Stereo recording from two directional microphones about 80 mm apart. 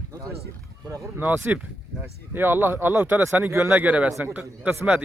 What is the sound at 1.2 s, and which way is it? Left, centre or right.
A man's voice, right.